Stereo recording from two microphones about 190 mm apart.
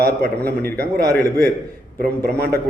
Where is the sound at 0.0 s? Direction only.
55° right (ahead or behind).